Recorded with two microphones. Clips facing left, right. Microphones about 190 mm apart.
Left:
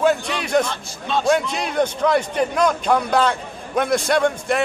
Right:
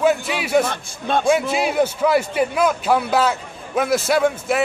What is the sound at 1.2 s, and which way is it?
A man's voice, 5° right (ahead or behind).